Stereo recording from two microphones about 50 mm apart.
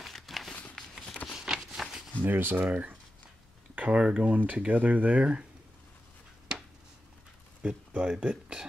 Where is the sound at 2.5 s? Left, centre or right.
Right.